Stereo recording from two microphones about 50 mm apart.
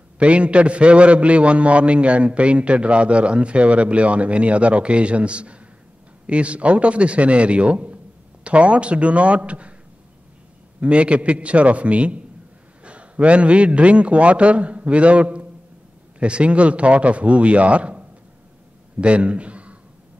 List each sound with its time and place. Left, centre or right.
0.2 s a man's voice: right
10.8 s a man's voice: right